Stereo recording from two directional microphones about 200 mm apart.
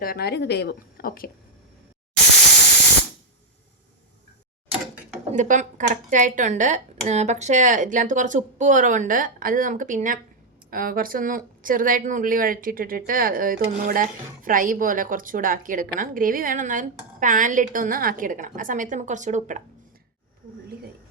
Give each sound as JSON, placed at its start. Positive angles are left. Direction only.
{"t": 0.0, "sound": "speech", "side_deg": 50}
{"t": 5.3, "sound": "speech", "side_deg": -40}